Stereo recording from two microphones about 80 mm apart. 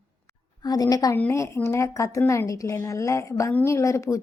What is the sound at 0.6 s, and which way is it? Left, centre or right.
Speech, left.